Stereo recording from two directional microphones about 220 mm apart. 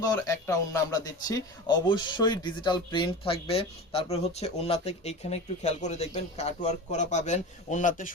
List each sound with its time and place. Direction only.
0.0 s speech: 15° left (ahead or behind); by 8.1 s 35° left (ahead or behind)